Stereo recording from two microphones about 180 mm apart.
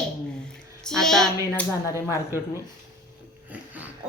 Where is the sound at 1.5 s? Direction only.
15° left (ahead or behind).